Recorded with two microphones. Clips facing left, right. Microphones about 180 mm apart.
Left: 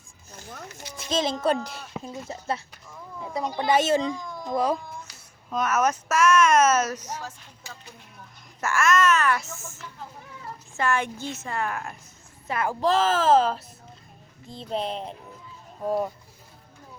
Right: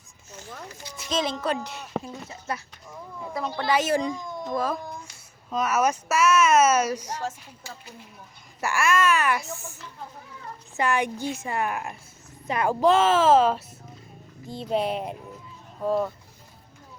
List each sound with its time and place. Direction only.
0.3 s a sound: 40° left (ahead or behind)
1.1 s a child's voice: 25° left (ahead or behind)
2.0 s speech: 55° right (ahead or behind)
3.3 s a child's voice: 15° left (ahead or behind)
5.5 s speech: 10° right (ahead or behind)
8.6 s speech: 15° right (ahead or behind)
10.8 s speech: 15° right (ahead or behind)
12.9 s speech: 35° left (ahead or behind)
13.2 s speech: 5° right (ahead or behind)